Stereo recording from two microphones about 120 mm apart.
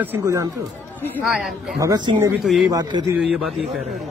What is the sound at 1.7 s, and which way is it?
Speech, 30° right (ahead or behind).